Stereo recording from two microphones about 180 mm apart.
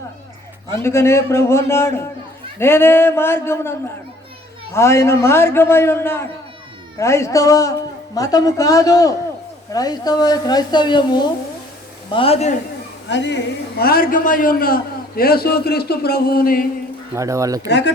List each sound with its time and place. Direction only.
0.7 s a man's voice: 15° left (ahead or behind); by 12.5 s 35° left (ahead or behind)
13.1 s a man's voice: 80° left; by 16.6 s 55° left (ahead or behind)
17.2 s speech: 15° right (ahead or behind)
17.7 s speech: 75° left (ahead or behind)